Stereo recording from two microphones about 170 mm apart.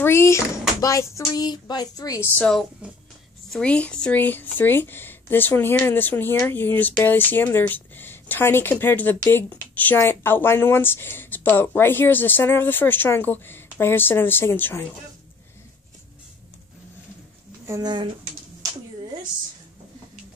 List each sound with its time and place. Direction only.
0.0 s speech: 15° left (ahead or behind)
2.8 s speech: 5° right (ahead or behind)
3.5 s speech: 5° left (ahead or behind)
17.6 s speech: 20° right (ahead or behind)